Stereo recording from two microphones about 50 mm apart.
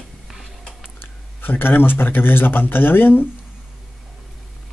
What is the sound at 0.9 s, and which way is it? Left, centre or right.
A man's voice, left.